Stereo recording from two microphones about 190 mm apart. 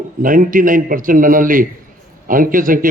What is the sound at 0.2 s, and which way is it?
Speech, 45° right (ahead or behind).